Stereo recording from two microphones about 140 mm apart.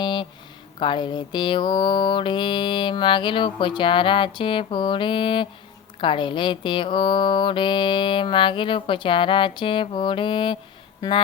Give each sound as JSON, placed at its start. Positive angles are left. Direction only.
{"t": 0.0, "sound": "a sound", "side_deg": 35}
{"t": 0.8, "sound": "mantra", "side_deg": 35}
{"t": 11.0, "sound": "speech", "side_deg": 25}